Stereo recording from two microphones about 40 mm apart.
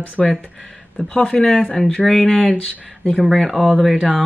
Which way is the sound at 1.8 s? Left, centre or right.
Left.